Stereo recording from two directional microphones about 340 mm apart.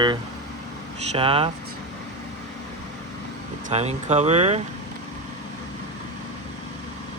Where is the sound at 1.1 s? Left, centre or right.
Centre.